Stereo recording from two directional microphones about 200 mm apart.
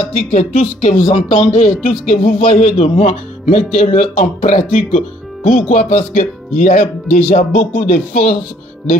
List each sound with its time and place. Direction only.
0.0 s speech: 35° left (ahead or behind)
0.9 s speech: 25° left (ahead or behind)
1.3 s speech: 35° left (ahead or behind)